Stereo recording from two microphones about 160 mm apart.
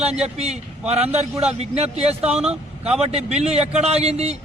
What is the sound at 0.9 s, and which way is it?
A man's voice, 40° right (ahead or behind).